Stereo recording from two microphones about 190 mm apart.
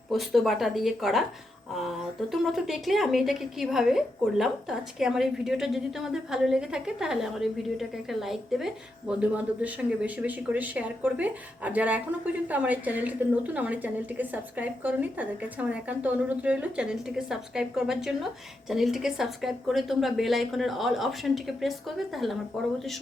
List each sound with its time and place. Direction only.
0.1 s speech: centre (ahead or behind)